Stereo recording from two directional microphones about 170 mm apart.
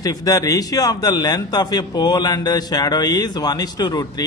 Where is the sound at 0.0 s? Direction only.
20° left (ahead or behind).